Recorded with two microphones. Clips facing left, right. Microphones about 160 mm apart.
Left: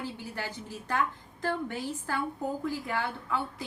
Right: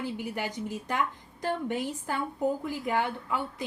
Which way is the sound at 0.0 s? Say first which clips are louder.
Right 4 dB; 15° right (ahead or behind).